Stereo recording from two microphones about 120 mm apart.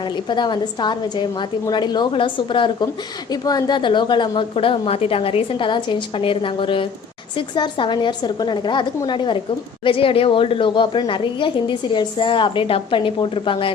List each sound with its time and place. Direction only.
0.0 s a woman's voice: 40° left (ahead or behind)
4.5 s a woman's voice: 50° left (ahead or behind)